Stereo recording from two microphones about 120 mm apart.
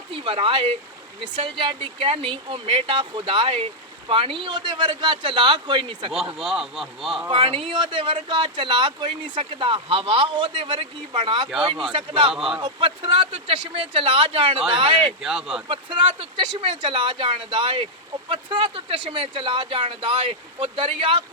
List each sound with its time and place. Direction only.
0.1 s speech: 50° right (ahead or behind)
6.3 s speech: 5° right (ahead or behind)
7.3 s speech: 45° right (ahead or behind)
12.3 s speech: 5° right (ahead or behind)
12.6 s speech: 45° right (ahead or behind)
15.2 s speech: 5° right (ahead or behind)
15.7 s speech: 45° right (ahead or behind)